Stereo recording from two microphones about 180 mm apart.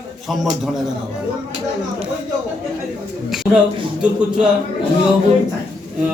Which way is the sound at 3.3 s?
Centre (ahead or behind).